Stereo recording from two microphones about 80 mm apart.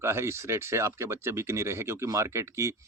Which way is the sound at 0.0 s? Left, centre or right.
Right.